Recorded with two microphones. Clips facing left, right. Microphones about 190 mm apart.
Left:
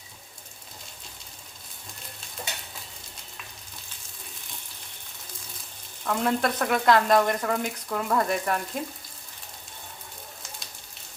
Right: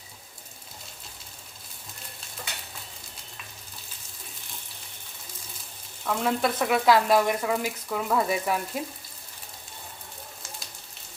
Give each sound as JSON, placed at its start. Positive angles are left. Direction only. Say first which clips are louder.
{"t": 6.1, "sound": "speech", "louder": "left 1 dB", "side_deg": 0}